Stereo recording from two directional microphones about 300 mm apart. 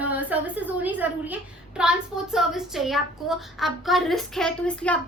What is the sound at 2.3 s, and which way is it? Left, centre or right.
A woman's voice, centre.